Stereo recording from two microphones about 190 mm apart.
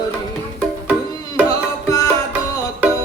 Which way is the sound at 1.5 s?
20° left (ahead or behind).